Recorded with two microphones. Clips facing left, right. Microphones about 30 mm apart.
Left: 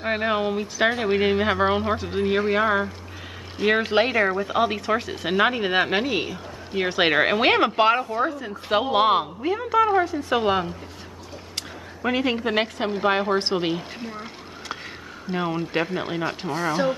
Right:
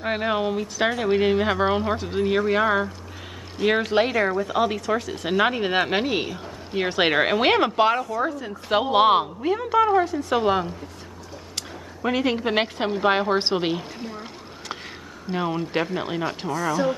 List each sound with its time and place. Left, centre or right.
0.0 s speech: centre; by 5.1 s left
5.1 s speech: centre
8.0 s speech: left
8.5 s speech: centre
12.0 s a woman's voice: centre
15.3 s speech: centre
16.5 s speech: left